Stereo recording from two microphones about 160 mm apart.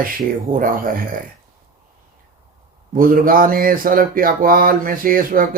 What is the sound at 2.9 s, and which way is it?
Speech, 60° right (ahead or behind).